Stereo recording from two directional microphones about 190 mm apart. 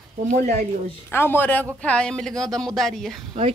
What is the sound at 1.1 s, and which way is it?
A woman's voice, 10° left (ahead or behind).